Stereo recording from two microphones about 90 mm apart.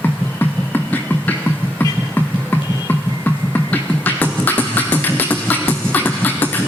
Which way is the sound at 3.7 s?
20° left (ahead or behind).